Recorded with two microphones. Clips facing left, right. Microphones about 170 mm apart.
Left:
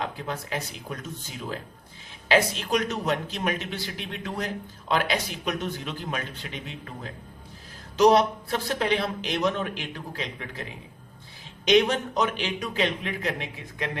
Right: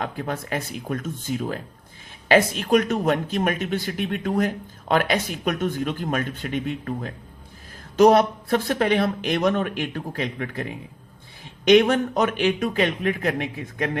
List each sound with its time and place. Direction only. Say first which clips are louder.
0.0 s speech: right 4 dB; 50° right (ahead or behind)